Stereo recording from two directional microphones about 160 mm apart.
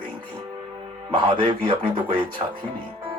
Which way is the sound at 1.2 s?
30° right (ahead or behind).